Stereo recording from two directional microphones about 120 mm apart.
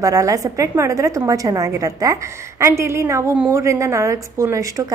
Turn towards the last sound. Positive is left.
turn(degrees=-25)  # may be behind; listen again after turning